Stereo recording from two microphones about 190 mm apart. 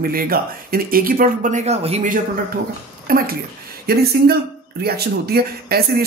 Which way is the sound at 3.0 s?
50° right (ahead or behind).